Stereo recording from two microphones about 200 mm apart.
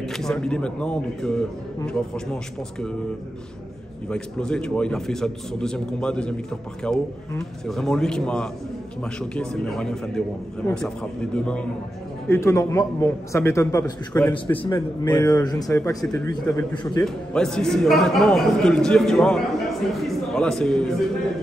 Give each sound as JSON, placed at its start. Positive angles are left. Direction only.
{"t": 0.0, "sound": "a man's voice", "side_deg": 0}
{"t": 4.1, "sound": "a man's voice", "side_deg": 5}
{"t": 17.0, "sound": "a man's voice", "side_deg": 5}